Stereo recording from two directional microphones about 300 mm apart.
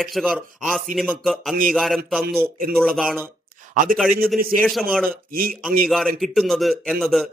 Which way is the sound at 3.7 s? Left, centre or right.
Right.